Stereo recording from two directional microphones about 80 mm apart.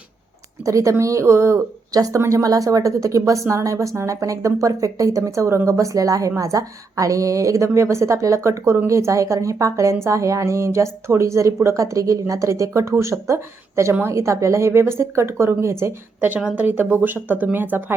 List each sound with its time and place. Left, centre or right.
0.6 s a woman's voice: right
1.9 s a woman's voice: right
16.6 s speech: right